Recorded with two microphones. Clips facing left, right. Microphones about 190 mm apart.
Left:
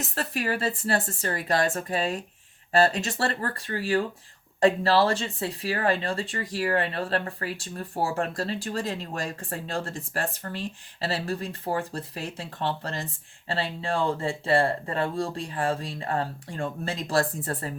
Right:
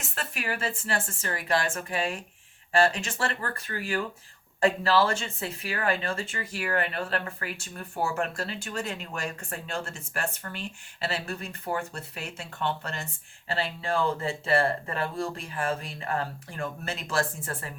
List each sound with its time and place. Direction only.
0.0 s speech: 40° left (ahead or behind)